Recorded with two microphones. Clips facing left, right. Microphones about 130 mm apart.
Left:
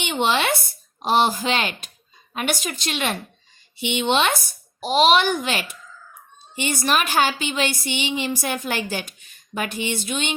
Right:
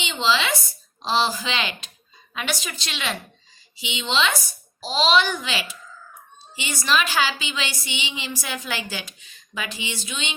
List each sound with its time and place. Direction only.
0.0 s a woman's voice: 60° left (ahead or behind)